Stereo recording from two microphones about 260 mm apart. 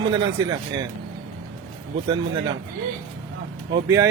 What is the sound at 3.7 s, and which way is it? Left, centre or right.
Speech, centre.